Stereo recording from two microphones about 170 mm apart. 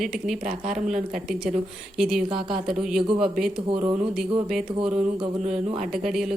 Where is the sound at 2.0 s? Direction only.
Centre (ahead or behind).